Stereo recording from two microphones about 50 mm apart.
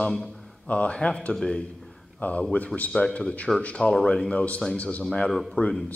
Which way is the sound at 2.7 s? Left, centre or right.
Centre.